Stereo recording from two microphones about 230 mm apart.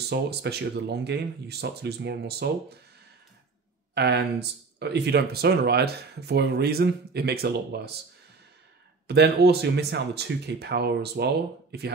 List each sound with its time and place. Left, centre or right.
0.1 s speech: right
3.9 s speech: right
9.0 s speech: right